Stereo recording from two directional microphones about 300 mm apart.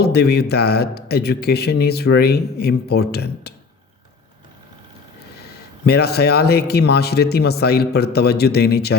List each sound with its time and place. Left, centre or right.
0.0 s a man's voice: left
5.8 s a man's voice: left